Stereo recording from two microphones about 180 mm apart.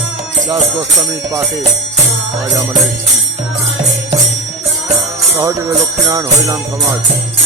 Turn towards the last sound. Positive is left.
turn(degrees=-20)  # may be behind; listen again after turning